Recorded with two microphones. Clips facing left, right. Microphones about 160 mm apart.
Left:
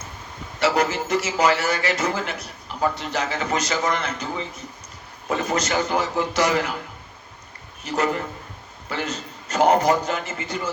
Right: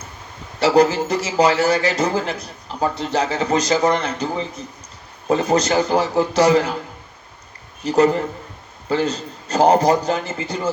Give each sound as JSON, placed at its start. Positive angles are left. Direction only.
{"t": 0.6, "sound": "speech", "side_deg": -35}
{"t": 7.9, "sound": "speech", "side_deg": -35}